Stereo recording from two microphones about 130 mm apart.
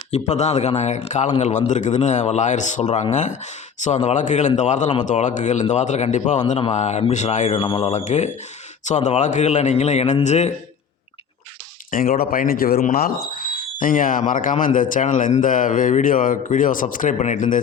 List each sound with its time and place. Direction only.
0.1 s a man's voice: 60° left (ahead or behind)
11.9 s speech: 90° left